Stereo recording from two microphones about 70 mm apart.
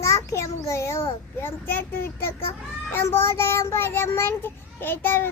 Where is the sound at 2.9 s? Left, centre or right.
Left.